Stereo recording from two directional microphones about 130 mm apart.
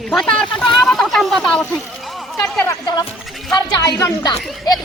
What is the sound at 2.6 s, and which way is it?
A woman's voice, 30° left (ahead or behind).